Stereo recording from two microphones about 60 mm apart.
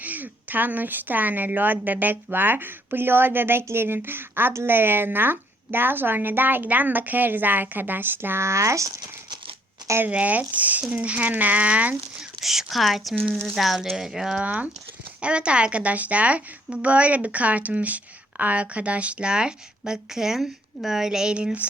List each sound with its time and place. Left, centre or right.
0.0 s a woman's voice: right
10.1 s a woman's voice: right
12.4 s speech: centre
14.4 s a woman's voice: right